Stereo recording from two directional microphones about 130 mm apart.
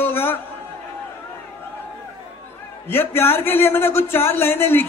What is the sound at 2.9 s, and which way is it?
Speech, 15° left (ahead or behind).